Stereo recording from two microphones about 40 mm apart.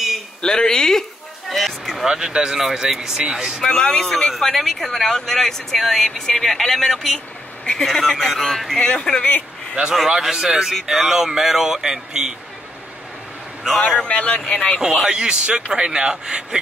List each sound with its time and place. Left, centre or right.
0.4 s speech: centre
1.5 s a sound: centre
2.0 s speech: centre
3.6 s speech: centre
4.4 s speech: centre
8.8 s speech: left
10.0 s speech: centre
13.7 s speech: left
14.8 s speech: centre